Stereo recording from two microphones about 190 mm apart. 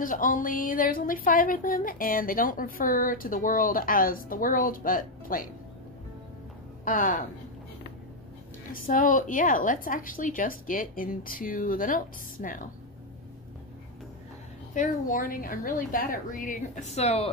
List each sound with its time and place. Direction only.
0.0 s speech: 45° left (ahead or behind)
6.8 s a woman's voice: 45° left (ahead or behind)
8.8 s speech: 45° left (ahead or behind)
14.7 s speech: 45° left (ahead or behind)